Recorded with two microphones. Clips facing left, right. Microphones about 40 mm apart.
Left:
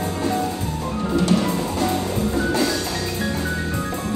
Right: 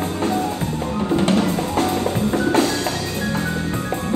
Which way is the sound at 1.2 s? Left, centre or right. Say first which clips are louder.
Left 1 dB; right.